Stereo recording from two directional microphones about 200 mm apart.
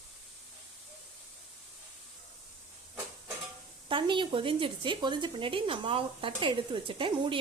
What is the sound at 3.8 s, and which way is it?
Speech, 25° right (ahead or behind).